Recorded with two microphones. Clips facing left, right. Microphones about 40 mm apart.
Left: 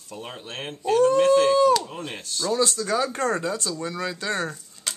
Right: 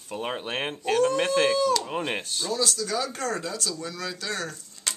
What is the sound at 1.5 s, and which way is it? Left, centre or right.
Speech, centre.